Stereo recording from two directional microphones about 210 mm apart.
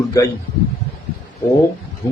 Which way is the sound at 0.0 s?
15° left (ahead or behind).